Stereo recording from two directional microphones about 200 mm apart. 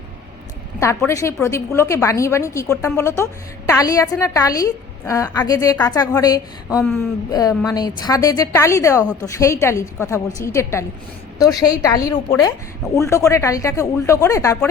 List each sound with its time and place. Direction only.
0.8 s a woman's voice: 15° left (ahead or behind)